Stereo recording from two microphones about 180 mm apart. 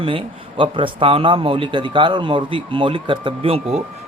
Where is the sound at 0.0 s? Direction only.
30° right (ahead or behind).